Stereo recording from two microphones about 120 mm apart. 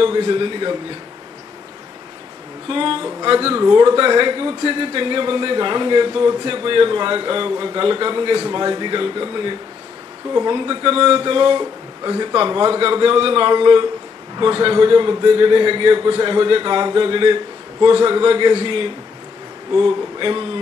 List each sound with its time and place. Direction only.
0.0 s speech: 40° right (ahead or behind)
2.7 s a man's voice: 45° right (ahead or behind)
3.3 s a man's voice: 20° right (ahead or behind); by 20.4 s 40° right (ahead or behind)